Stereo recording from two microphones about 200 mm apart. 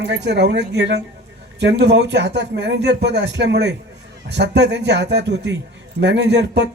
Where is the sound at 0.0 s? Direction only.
60° right (ahead or behind).